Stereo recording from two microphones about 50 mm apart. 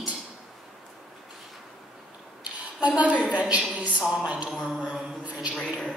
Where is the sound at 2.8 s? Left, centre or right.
Right.